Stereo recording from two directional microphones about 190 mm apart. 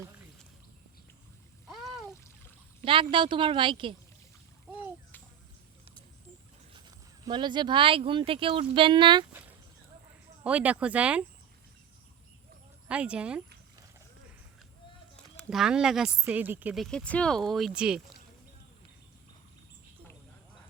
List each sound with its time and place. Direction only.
1.6 s a sound: centre (ahead or behind)
2.8 s a woman's voice: 25° right (ahead or behind)
6.7 s speech: 25° right (ahead or behind)
10.4 s speech: 5° right (ahead or behind)
12.9 s speech: 5° right (ahead or behind)
15.1 s speech: centre (ahead or behind)